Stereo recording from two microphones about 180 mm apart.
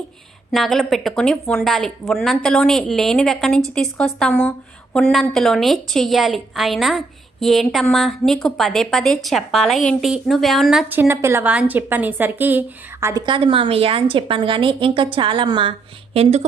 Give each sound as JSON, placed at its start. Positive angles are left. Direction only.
{"t": 0.5, "sound": "a woman's voice", "side_deg": 0}
{"t": 13.2, "sound": "a woman's voice", "side_deg": -30}